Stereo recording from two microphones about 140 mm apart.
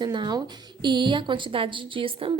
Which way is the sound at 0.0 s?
30° right (ahead or behind).